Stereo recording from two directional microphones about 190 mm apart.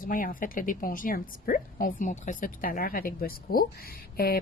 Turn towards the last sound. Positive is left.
turn(degrees=50)  # may be behind; listen again after turning